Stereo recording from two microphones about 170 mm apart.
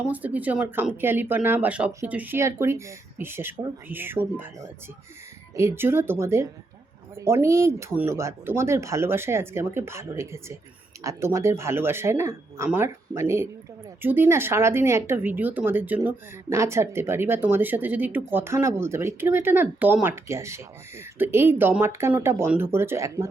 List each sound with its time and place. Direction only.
0.1 s speech: 10° right (ahead or behind)